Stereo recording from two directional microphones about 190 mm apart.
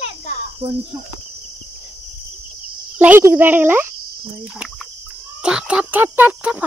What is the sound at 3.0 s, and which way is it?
Speech, 10° right (ahead or behind).